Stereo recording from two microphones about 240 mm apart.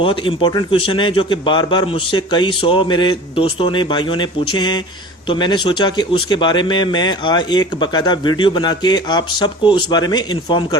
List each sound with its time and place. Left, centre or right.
0.0 s a man's voice: left